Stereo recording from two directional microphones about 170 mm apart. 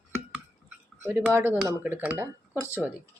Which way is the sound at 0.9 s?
15° right (ahead or behind).